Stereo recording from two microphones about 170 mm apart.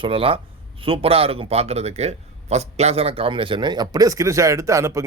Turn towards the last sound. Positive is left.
turn(degrees=-20)  # may be behind; listen again after turning